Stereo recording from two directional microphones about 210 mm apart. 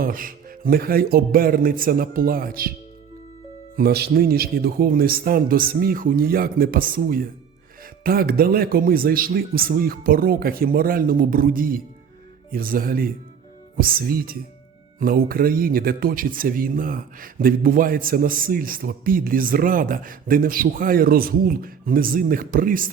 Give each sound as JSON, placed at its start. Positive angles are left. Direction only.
{"t": 0.0, "sound": "speech", "side_deg": -40}
{"t": 3.8, "sound": "speech", "side_deg": -50}